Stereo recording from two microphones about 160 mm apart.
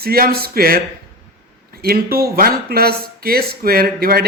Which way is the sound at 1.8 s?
70° right (ahead or behind).